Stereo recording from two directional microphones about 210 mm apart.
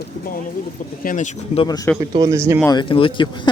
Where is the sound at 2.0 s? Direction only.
15° right (ahead or behind).